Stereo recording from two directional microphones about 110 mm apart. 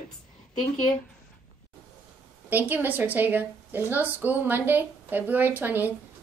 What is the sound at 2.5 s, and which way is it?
A woman's voice, 15° right (ahead or behind).